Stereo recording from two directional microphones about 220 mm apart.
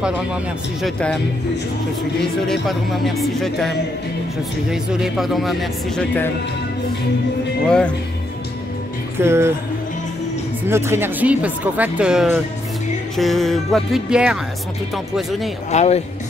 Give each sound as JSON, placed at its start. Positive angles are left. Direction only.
{"t": 0.0, "sound": "speech", "side_deg": -5}
{"t": 7.6, "sound": "speech", "side_deg": 5}
{"t": 9.2, "sound": "speech", "side_deg": -10}
{"t": 10.7, "sound": "speech", "side_deg": -10}
{"t": 15.7, "sound": "speech", "side_deg": 30}